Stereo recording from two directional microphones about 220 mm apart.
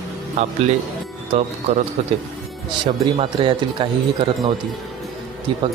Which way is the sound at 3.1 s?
25° right (ahead or behind).